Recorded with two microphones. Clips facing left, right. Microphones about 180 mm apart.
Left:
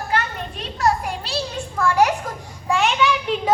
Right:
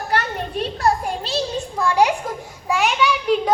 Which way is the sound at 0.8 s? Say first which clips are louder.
Left 1 dB; 30° right (ahead or behind).